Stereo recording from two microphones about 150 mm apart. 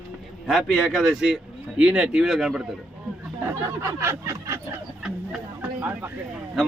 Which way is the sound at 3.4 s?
20° right (ahead or behind).